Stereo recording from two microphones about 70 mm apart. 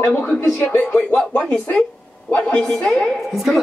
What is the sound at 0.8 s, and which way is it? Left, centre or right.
Speech, left.